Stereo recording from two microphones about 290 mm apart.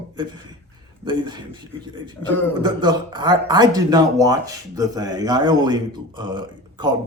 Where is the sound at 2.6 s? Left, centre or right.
Centre.